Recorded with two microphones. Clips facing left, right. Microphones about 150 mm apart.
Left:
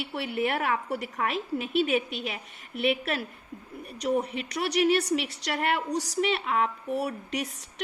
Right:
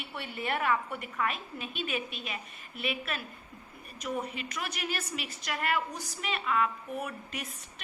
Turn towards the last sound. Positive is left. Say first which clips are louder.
# left 9 dB
turn(degrees=75)  # may be behind; listen again after turning